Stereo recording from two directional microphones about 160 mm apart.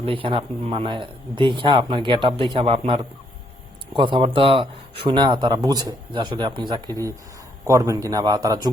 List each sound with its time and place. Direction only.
0.0 s speech: 35° right (ahead or behind)